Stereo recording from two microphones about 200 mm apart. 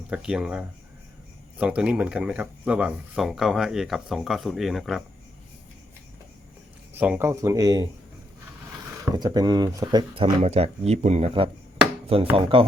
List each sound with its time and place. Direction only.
0.1 s speech: 5° right (ahead or behind)
6.9 s speech: 10° right (ahead or behind)
9.1 s speech: 20° right (ahead or behind)